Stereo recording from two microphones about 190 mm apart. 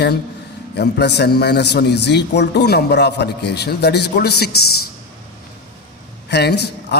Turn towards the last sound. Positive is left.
turn(degrees=60)  # may be behind; listen again after turning